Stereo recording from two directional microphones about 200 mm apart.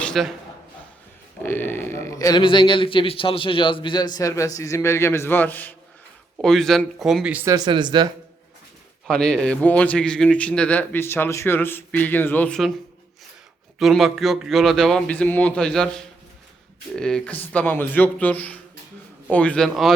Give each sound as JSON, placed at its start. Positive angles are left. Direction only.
{"t": 0.0, "sound": "a man's voice", "side_deg": 0}
{"t": 1.4, "sound": "speech", "side_deg": 10}
{"t": 9.0, "sound": "speech", "side_deg": 5}
{"t": 13.7, "sound": "speech", "side_deg": 0}